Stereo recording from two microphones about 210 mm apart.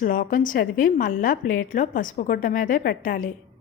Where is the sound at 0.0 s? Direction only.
40° left (ahead or behind).